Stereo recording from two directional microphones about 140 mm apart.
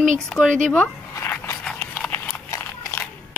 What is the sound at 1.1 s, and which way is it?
Dog, 20° left (ahead or behind).